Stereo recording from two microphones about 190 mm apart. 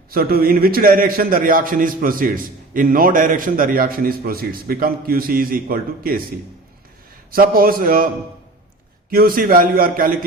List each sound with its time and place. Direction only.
0.1 s a man's voice: 50° right (ahead or behind)
7.3 s a man's voice: 50° right (ahead or behind)